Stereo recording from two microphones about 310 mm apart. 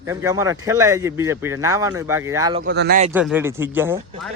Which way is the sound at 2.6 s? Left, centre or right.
Right.